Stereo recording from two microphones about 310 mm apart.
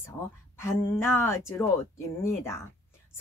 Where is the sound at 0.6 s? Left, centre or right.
Centre.